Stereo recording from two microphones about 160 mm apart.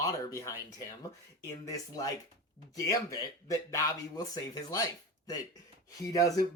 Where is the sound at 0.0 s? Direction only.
20° left (ahead or behind).